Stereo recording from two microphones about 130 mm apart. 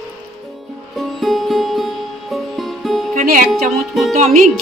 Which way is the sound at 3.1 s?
90° right.